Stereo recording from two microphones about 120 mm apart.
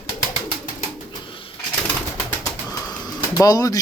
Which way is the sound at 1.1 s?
45° left (ahead or behind).